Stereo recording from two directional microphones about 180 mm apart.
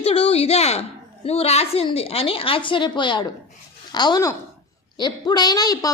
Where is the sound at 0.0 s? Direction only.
35° left (ahead or behind).